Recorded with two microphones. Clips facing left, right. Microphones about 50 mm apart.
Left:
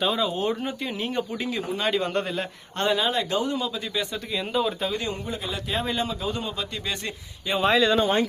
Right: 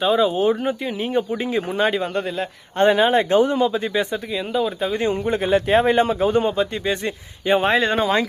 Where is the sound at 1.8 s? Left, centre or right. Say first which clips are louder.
Right 3 dB; centre.